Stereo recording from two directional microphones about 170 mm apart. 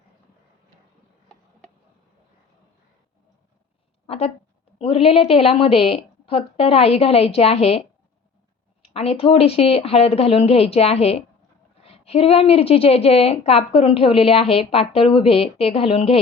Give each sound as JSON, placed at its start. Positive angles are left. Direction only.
{"t": 4.0, "sound": "a sound", "side_deg": 35}
{"t": 4.8, "sound": "a woman's voice", "side_deg": 35}
{"t": 8.9, "sound": "a woman's voice", "side_deg": 35}